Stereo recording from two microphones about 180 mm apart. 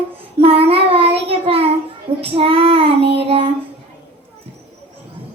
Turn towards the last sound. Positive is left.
turn(degrees=-30)  # may be behind; listen again after turning